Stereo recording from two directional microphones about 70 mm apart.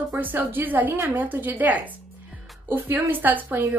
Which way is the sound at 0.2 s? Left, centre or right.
Right.